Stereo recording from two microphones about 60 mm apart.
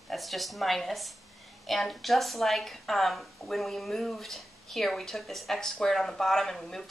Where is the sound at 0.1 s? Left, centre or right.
Centre.